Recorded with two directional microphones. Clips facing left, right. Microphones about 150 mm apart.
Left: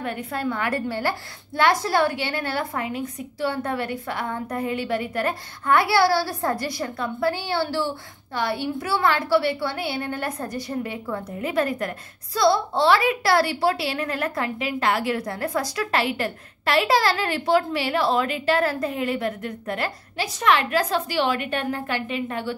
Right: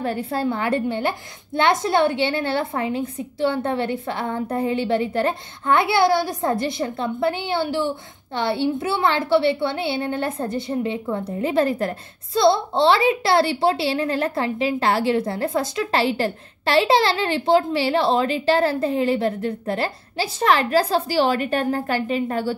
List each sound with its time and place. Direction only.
0.0 s a woman's voice: 30° right (ahead or behind)